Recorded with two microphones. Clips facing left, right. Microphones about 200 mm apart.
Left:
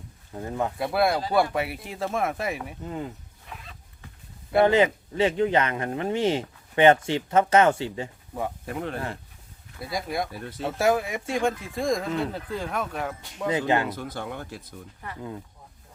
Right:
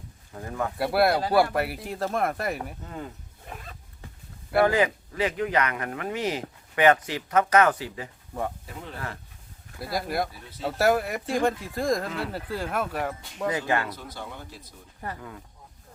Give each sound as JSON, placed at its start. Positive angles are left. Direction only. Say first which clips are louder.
{"t": 0.3, "sound": "speech", "louder": "left 2 dB", "side_deg": 20}
{"t": 0.8, "sound": "speech", "louder": "right 3 dB", "side_deg": -5}
{"t": 2.8, "sound": "speech", "louder": "left 4 dB", "side_deg": 15}
{"t": 3.4, "sound": "a sound", "louder": "right 3 dB", "side_deg": -45}
{"t": 4.6, "sound": "speech", "louder": "left 3 dB", "side_deg": 25}
{"t": 8.6, "sound": "speech", "louder": "left 9 dB", "side_deg": 65}
{"t": 9.9, "sound": "speech", "louder": "right 1 dB", "side_deg": 0}
{"t": 13.5, "sound": "speech", "louder": "left 4 dB", "side_deg": 20}
{"t": 13.9, "sound": "speech", "louder": "left 5 dB", "side_deg": 55}
{"t": 15.0, "sound": "speech", "louder": "right 5 dB", "side_deg": -40}